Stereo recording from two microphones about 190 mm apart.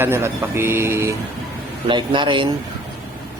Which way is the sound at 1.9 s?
25° right (ahead or behind).